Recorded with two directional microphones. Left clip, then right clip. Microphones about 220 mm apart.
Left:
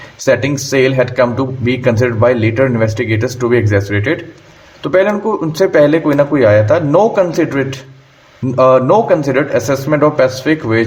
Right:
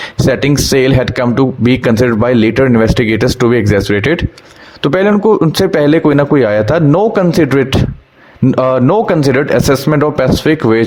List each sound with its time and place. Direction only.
0.3 s speech: 35° right (ahead or behind)